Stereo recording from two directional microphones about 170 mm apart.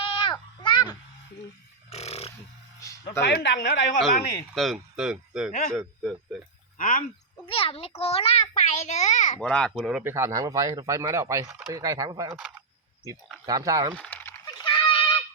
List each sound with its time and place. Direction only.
0.0 s a sound: 30° left (ahead or behind)
1.9 s a sound: 40° left (ahead or behind)
2.8 s speech: 15° left (ahead or behind)
3.2 s speech: 75° left (ahead or behind)
4.5 s speech: centre (ahead or behind)
5.5 s a man's voice: 45° left (ahead or behind)
5.7 s speech: centre (ahead or behind)
6.7 s speech: 50° left (ahead or behind)
7.4 s a child's voice: 30° left (ahead or behind)
9.4 s speech: 5° left (ahead or behind); by 12.3 s 20° right (ahead or behind)
12.3 s speech: centre (ahead or behind)
13.4 s speech: 20° right (ahead or behind)
13.9 s a sound: 10° left (ahead or behind)
14.6 s a sound: 30° left (ahead or behind)